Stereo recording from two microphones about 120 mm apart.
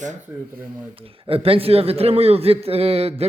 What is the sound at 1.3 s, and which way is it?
A man's voice, 50° right (ahead or behind).